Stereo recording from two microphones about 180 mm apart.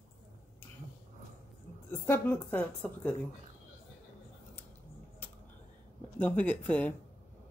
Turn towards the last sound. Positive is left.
turn(degrees=10)  # may be behind; listen again after turning